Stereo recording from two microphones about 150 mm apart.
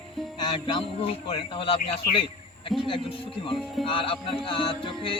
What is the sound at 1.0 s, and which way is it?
Speech, 35° left (ahead or behind).